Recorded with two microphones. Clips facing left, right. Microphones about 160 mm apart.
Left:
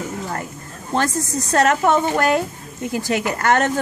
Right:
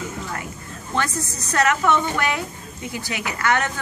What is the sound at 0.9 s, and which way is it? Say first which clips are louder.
Speech: left 5 dB; 45° left (ahead or behind).